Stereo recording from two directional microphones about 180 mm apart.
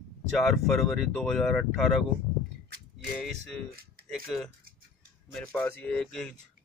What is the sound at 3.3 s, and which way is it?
Speech, centre (ahead or behind).